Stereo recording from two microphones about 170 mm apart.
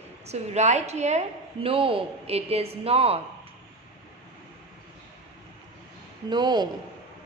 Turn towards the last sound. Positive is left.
turn(degrees=-25)  # may be behind; listen again after turning